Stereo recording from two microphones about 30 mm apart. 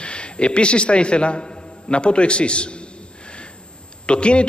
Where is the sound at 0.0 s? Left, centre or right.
Left.